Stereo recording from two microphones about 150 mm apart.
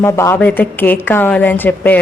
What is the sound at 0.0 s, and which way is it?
A woman's voice, 20° left (ahead or behind).